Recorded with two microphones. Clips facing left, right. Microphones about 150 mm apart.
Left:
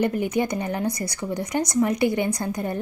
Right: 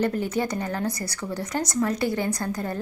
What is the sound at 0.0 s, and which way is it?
A woman's voice, 15° left (ahead or behind).